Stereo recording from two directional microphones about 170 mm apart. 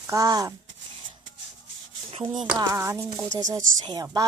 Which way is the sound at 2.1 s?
25° right (ahead or behind).